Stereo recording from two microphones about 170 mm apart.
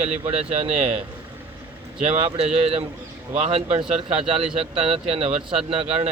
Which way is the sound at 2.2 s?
35° right (ahead or behind).